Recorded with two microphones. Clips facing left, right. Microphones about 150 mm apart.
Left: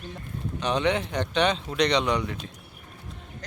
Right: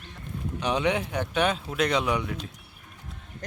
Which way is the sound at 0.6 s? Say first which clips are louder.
Left 1 dB; 10° right (ahead or behind).